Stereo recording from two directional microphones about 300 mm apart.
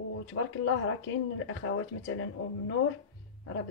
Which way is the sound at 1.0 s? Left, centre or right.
Left.